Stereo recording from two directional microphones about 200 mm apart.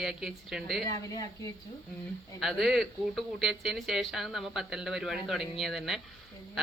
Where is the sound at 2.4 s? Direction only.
Centre (ahead or behind).